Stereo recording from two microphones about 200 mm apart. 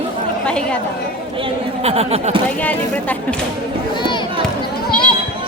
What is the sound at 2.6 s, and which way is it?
Speech, 5° left (ahead or behind).